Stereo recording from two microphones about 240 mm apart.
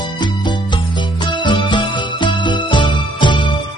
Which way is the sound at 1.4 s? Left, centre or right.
Centre.